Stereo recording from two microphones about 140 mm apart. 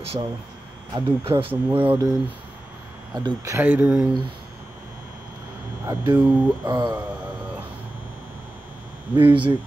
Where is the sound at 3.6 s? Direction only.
10° right (ahead or behind).